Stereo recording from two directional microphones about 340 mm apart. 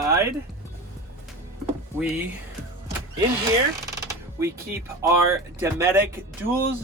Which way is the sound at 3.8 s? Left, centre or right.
Centre.